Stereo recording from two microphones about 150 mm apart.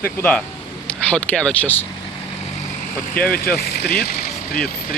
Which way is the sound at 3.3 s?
80° left.